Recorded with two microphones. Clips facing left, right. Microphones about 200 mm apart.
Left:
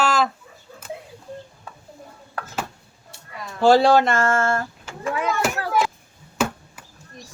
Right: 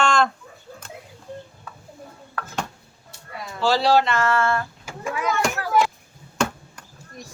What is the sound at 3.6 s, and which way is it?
Speech, 50° left (ahead or behind).